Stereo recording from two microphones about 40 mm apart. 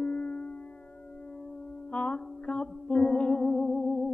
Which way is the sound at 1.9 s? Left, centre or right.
Left.